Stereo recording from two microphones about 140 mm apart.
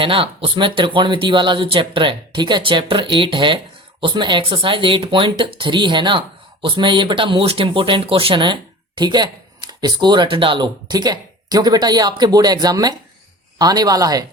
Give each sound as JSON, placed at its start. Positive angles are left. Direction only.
{"t": 0.0, "sound": "speech", "side_deg": -40}